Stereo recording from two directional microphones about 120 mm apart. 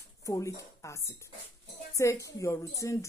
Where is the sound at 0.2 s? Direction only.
25° left (ahead or behind).